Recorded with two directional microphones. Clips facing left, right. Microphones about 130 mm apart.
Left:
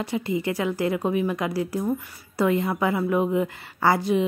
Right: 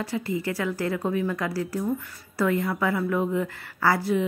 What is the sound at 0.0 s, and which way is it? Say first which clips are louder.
A woman's voice: left 2 dB; 20° left (ahead or behind).